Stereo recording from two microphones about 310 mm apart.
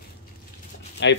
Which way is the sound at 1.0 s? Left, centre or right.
Left.